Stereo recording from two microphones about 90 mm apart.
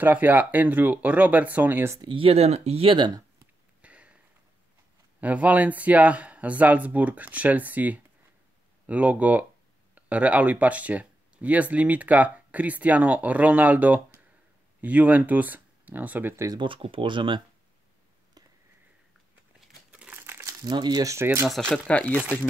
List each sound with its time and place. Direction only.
0.0 s speech: 20° right (ahead or behind)
2.0 s speech: 75° right (ahead or behind)
3.8 s a sound: 15° right (ahead or behind)
5.2 s speech: 15° right (ahead or behind)
16.5 s speech: 70° right (ahead or behind)
19.9 s crumpling: 15° right (ahead or behind)
20.2 s crumpling: 30° right (ahead or behind)
20.6 s speech: 50° right (ahead or behind)
21.1 s speech: 30° right (ahead or behind)
21.5 s speech: 5° left (ahead or behind)